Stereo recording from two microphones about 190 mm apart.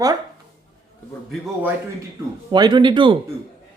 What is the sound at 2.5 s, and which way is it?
Speech, 25° right (ahead or behind).